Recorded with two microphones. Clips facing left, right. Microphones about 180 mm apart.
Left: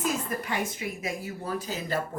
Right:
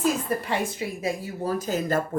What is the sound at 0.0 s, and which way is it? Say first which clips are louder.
A woman's voice: right 5 dB; 30° right (ahead or behind).